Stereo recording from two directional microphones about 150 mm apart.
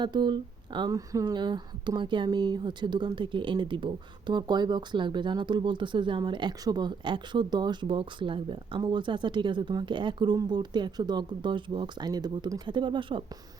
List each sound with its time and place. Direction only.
0.0 s speech: 30° right (ahead or behind)